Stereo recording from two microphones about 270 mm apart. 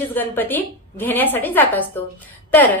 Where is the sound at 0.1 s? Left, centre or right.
Centre.